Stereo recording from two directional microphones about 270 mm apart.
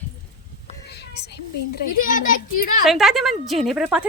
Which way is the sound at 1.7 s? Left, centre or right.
Left.